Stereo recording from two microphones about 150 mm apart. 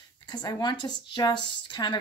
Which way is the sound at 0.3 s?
25° left (ahead or behind).